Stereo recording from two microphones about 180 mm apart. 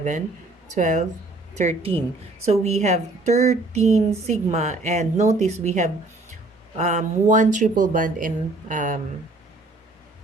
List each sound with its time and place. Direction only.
0.7 s speech: 45° right (ahead or behind)